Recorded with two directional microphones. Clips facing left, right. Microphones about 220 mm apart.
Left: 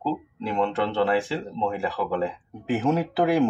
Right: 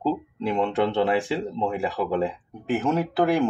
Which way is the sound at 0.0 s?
15° right (ahead or behind).